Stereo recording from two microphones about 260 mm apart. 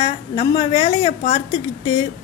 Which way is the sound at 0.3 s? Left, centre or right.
Centre.